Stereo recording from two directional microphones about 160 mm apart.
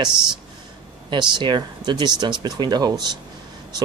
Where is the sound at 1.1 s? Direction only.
30° right (ahead or behind).